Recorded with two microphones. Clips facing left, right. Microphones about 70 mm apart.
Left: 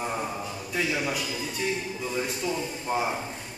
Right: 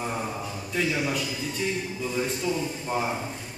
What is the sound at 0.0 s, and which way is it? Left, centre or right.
A man's voice, centre.